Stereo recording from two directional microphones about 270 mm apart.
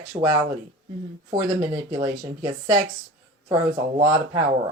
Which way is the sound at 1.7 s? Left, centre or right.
Centre.